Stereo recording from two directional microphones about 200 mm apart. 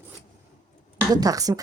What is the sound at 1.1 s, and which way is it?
Speech, 20° right (ahead or behind).